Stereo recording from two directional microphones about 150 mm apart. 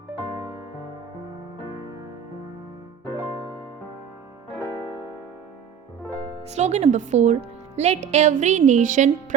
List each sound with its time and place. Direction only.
3.1 s music: 20° right (ahead or behind)
6.5 s a woman's voice: 50° right (ahead or behind)